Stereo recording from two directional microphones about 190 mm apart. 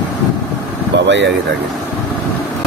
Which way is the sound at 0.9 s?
70° right (ahead or behind).